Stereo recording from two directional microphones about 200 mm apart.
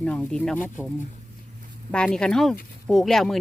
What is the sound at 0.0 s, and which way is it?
Speech, 5° left (ahead or behind).